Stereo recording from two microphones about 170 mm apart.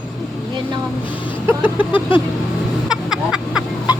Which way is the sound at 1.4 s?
10° right (ahead or behind).